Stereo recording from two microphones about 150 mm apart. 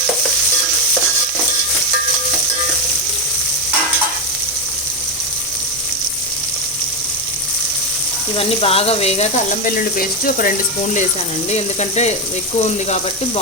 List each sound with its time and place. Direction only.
8.4 s speech: 40° left (ahead or behind)
10.0 s speech: 70° left (ahead or behind)
11.5 s speech: 50° left (ahead or behind)